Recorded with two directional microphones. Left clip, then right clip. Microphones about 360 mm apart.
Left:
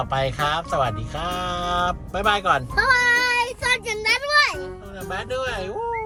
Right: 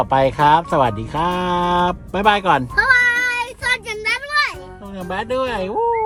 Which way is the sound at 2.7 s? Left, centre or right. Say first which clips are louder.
Right 3 dB; centre.